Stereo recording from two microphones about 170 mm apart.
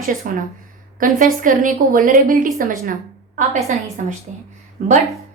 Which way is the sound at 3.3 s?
45° right (ahead or behind).